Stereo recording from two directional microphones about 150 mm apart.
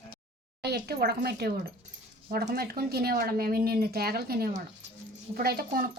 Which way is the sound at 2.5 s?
90° right.